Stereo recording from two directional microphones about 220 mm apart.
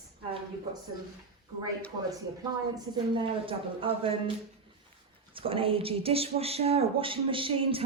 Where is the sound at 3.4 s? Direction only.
25° right (ahead or behind).